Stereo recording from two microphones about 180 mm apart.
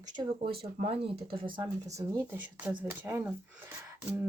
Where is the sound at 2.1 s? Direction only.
10° right (ahead or behind).